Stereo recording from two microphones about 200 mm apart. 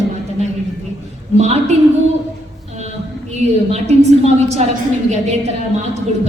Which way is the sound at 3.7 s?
30° right (ahead or behind).